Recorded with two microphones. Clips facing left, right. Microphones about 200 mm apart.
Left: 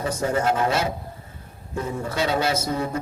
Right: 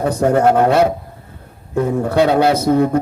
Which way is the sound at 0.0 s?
60° right (ahead or behind).